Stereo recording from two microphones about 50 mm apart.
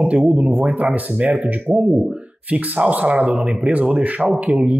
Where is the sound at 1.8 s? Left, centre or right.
Centre.